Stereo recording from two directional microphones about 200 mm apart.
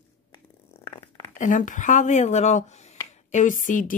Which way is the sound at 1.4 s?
40° left (ahead or behind).